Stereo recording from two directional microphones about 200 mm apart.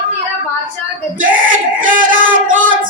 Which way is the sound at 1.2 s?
45° right (ahead or behind).